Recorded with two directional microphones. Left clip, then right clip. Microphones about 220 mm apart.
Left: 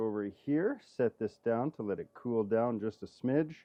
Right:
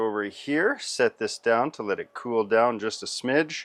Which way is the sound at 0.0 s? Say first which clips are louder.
Right 8 dB; 10° right (ahead or behind).